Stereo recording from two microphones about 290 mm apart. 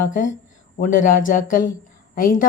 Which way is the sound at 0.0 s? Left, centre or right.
Left.